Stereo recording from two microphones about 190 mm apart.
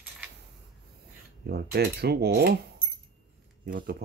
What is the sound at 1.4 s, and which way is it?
Speech, 55° right (ahead or behind).